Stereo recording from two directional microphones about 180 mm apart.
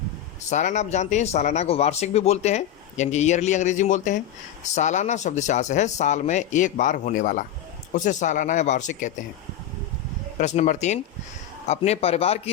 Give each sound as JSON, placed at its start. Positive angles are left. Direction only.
{"t": 0.5, "sound": "speech", "side_deg": 40}
{"t": 10.3, "sound": "speech", "side_deg": 40}